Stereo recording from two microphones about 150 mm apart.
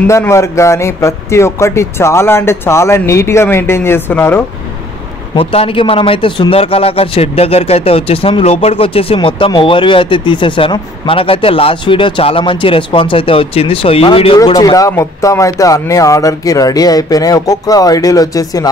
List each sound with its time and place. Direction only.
0.0 s speech: 20° left (ahead or behind)
5.3 s speech: 40° left (ahead or behind)
14.4 s speech: 25° left (ahead or behind)